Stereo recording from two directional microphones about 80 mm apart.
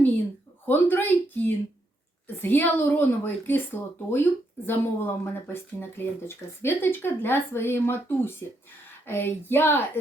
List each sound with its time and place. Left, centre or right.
0.7 s a woman's voice: left